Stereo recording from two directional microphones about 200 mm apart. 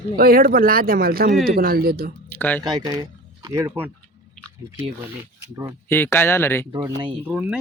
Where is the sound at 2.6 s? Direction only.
20° right (ahead or behind).